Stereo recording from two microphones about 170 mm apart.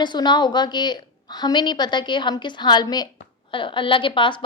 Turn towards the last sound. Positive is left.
turn(degrees=30)  # may be behind; listen again after turning